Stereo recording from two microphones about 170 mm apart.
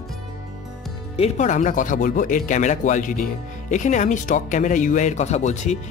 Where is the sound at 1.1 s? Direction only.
40° left (ahead or behind).